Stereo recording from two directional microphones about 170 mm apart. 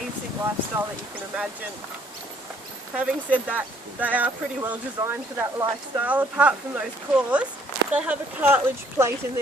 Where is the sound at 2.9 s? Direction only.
5° right (ahead or behind).